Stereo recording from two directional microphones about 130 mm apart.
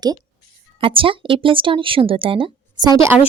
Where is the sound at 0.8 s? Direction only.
40° right (ahead or behind).